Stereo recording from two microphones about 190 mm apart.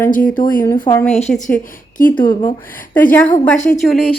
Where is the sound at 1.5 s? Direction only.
45° left (ahead or behind).